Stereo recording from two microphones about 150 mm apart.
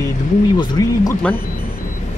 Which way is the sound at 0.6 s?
25° left (ahead or behind).